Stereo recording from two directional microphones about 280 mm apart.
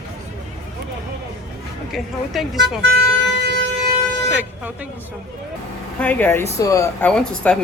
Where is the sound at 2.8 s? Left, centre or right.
Right.